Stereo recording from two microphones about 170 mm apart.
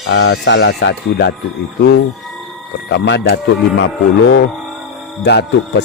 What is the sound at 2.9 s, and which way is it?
Speech, 90° left.